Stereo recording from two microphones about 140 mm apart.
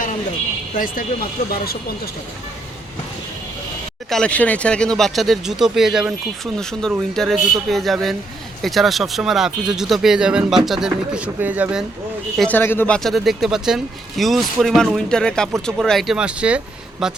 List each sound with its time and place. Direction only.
1.4 s speech: 90° left
4.1 s speech: 5° left (ahead or behind); by 11.9 s 10° right (ahead or behind)
12.4 s speech: 10° left (ahead or behind)
13.0 s speech: centre (ahead or behind)